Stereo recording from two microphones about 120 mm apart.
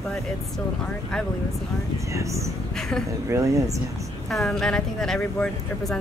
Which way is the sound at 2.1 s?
25° right (ahead or behind).